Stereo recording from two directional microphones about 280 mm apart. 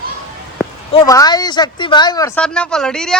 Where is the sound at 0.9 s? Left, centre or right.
Centre.